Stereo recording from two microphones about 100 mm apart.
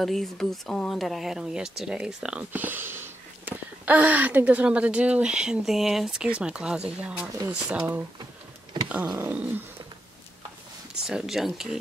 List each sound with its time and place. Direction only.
0.0 s speech: centre (ahead or behind); by 8.0 s 15° right (ahead or behind)
8.8 s a sound: 15° right (ahead or behind)
9.2 s speech: 15° right (ahead or behind)
11.1 s speech: 5° right (ahead or behind)